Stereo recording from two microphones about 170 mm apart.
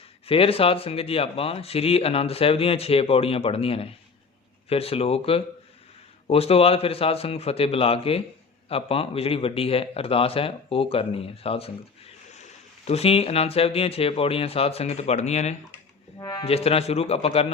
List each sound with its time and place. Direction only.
0.3 s speech: 35° left (ahead or behind)
16.1 s speech: 20° left (ahead or behind)
16.4 s speech: 35° left (ahead or behind)